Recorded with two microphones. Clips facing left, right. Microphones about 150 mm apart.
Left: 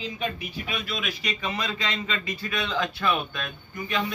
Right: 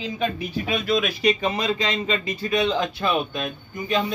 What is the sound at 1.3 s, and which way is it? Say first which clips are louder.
A man's voice: right 7 dB; 25° right (ahead or behind).